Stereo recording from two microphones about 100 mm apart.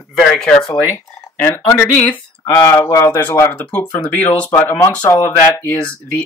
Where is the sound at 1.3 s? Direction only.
20° left (ahead or behind).